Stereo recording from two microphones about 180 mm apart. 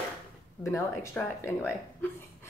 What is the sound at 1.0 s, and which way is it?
Speech, 15° left (ahead or behind).